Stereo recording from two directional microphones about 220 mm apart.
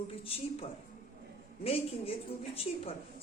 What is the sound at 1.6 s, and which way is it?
Speech, 25° left (ahead or behind).